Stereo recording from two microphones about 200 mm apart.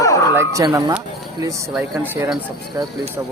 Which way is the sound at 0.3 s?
15° right (ahead or behind).